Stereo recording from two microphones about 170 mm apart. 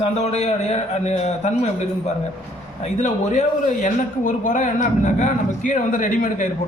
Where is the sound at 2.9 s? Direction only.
45° left (ahead or behind).